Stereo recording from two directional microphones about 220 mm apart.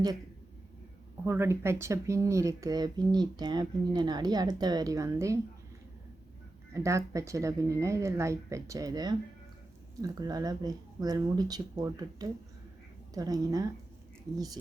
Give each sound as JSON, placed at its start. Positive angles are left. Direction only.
{"t": 1.2, "sound": "speech", "side_deg": -10}
{"t": 6.7, "sound": "speech", "side_deg": -15}